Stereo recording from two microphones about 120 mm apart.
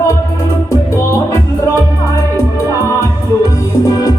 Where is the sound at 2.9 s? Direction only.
30° left (ahead or behind).